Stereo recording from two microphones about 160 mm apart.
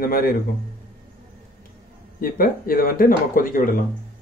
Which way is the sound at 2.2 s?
60° left (ahead or behind).